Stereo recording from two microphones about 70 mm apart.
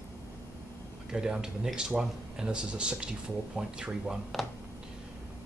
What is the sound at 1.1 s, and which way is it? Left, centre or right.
Speech, centre.